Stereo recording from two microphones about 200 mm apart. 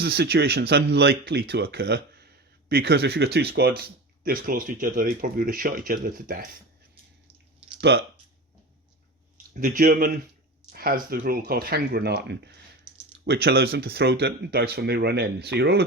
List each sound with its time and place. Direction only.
0.0 s speech: 50° right (ahead or behind)
7.8 s speech: 55° right (ahead or behind)
9.6 s speech: 40° right (ahead or behind)